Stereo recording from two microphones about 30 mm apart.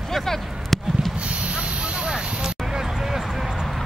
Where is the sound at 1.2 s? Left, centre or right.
Right.